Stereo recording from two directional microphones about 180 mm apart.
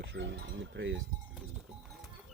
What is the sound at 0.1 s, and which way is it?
Speech, 75° right (ahead or behind).